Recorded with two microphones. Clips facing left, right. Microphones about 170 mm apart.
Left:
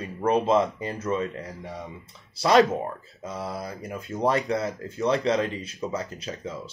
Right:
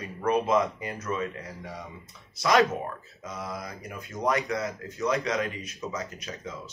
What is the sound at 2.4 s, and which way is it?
Speech, 30° left (ahead or behind).